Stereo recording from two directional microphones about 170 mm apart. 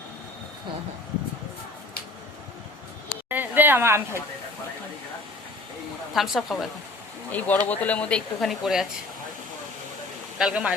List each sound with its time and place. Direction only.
3.1 s a sound: 10° right (ahead or behind)
6.1 s speech: centre (ahead or behind)
7.3 s speech: 10° left (ahead or behind)
10.3 s speech: 5° right (ahead or behind)